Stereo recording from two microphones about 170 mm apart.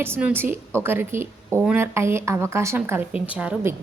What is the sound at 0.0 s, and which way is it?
A woman's voice, 10° right (ahead or behind).